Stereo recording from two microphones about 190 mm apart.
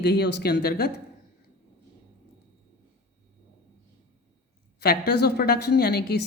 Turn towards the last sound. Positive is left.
turn(degrees=60)  # may be behind; listen again after turning